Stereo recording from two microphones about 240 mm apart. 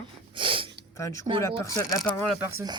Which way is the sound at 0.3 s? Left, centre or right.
Right.